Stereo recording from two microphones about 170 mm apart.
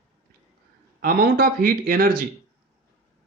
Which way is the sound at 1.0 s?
60° right (ahead or behind).